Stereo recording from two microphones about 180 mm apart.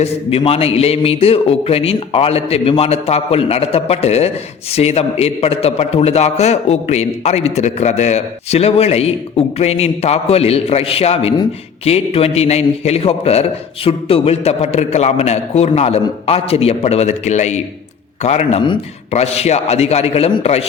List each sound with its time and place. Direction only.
0.0 s a man's voice: 35° left (ahead or behind)